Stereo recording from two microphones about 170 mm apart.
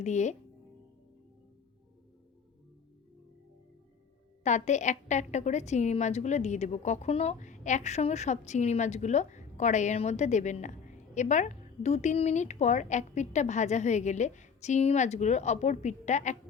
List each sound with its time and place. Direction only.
0.0 s a woman's voice: 45° left (ahead or behind)
4.4 s a woman's voice: 45° left (ahead or behind)